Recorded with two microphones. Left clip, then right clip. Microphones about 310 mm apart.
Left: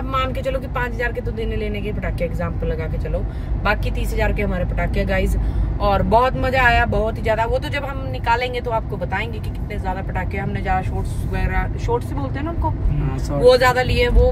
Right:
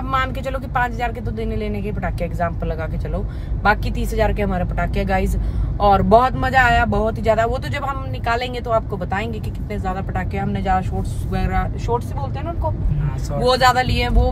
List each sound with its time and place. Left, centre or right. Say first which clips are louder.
0.1 s speech: even; centre
13.5 s speech: left 1 dB; centre